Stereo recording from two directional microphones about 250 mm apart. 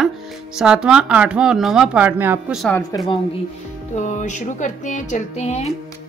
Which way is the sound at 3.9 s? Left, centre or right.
Left.